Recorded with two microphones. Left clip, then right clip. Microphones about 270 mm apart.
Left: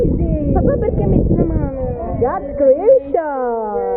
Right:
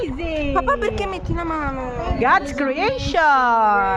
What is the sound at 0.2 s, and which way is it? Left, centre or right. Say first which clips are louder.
Speech: left 2 dB; centre.